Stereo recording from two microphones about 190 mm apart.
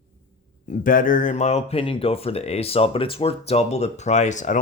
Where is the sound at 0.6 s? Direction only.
45° left (ahead or behind).